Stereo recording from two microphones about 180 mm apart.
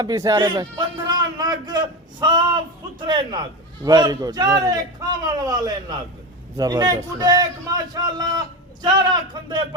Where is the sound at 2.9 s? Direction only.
25° right (ahead or behind).